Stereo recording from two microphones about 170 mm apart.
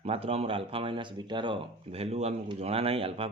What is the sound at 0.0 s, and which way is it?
Speech, 35° right (ahead or behind).